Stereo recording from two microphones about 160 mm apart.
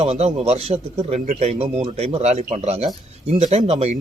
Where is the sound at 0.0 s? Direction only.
45° right (ahead or behind).